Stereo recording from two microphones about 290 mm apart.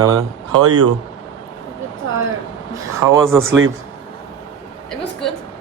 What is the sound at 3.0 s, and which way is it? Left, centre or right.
Speech, centre.